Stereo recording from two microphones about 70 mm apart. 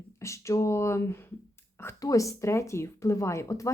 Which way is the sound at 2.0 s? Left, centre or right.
Left.